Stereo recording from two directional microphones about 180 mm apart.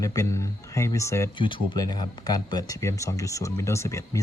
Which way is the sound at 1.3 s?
25° left (ahead or behind).